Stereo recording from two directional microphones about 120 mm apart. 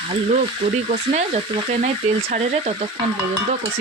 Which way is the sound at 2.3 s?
60° right (ahead or behind).